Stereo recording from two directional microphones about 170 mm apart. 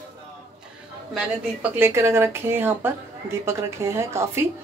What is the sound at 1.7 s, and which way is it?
A woman's voice, 15° right (ahead or behind).